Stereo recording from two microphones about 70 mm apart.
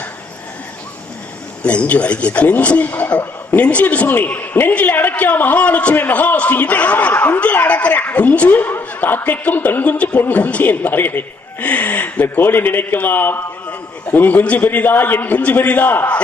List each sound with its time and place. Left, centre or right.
1.6 s speech: centre